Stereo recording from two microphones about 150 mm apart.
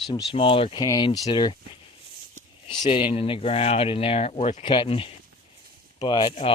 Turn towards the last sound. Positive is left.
turn(degrees=35)  # may be behind; listen again after turning